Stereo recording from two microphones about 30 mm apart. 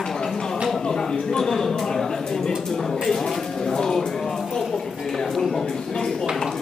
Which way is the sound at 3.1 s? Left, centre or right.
Centre.